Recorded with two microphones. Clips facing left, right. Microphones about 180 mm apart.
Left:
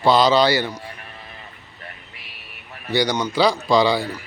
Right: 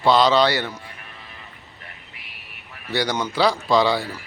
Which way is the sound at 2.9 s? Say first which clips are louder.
Left 3 dB; 5° right (ahead or behind).